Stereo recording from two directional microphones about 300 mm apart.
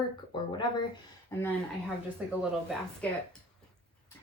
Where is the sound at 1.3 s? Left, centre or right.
Centre.